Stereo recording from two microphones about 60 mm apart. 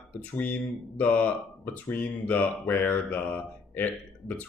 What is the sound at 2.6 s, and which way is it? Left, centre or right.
Mantra, left.